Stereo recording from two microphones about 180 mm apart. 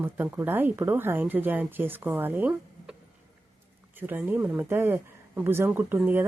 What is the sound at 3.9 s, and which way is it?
A woman's voice, 10° right (ahead or behind).